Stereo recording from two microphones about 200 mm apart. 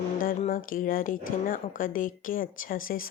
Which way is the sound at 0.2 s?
45° left (ahead or behind).